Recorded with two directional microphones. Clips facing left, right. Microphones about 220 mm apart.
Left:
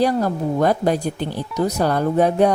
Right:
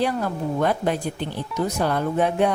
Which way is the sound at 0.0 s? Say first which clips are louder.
Left 5 dB; 40° left (ahead or behind).